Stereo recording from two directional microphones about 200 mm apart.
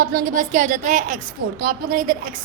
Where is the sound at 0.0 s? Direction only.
45° right (ahead or behind).